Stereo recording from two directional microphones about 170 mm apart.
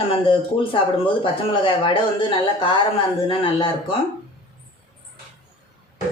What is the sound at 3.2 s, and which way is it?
Speech, 30° left (ahead or behind).